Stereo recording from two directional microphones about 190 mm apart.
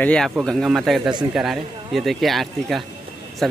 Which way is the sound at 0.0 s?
5° left (ahead or behind).